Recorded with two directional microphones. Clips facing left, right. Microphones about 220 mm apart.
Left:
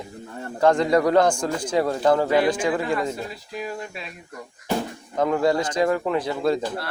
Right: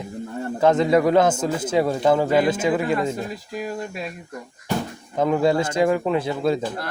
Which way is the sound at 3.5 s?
45° right (ahead or behind).